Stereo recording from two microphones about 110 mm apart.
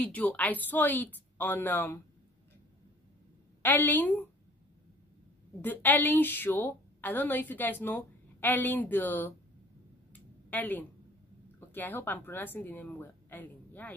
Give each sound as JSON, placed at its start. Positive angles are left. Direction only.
{"t": 0.0, "sound": "a woman's voice", "side_deg": 15}
{"t": 3.6, "sound": "a woman's voice", "side_deg": 15}
{"t": 5.6, "sound": "a woman's voice", "side_deg": 15}
{"t": 10.5, "sound": "a woman's voice", "side_deg": 15}